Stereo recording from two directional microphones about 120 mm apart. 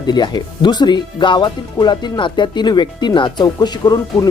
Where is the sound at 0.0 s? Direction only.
35° left (ahead or behind).